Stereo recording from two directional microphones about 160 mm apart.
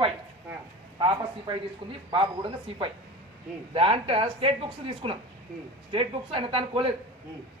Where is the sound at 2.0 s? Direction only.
35° right (ahead or behind).